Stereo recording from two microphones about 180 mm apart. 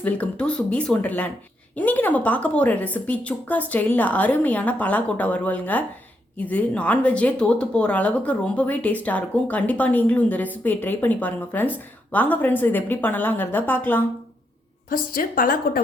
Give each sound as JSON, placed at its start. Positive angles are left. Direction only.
{"t": 0.0, "sound": "speech", "side_deg": 5}
{"t": 14.8, "sound": "a woman's voice", "side_deg": 50}